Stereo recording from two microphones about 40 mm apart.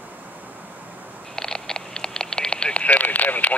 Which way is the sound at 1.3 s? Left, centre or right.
Centre.